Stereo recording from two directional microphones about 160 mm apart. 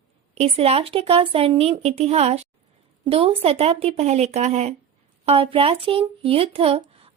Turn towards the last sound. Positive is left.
turn(degrees=-35)  # may be behind; listen again after turning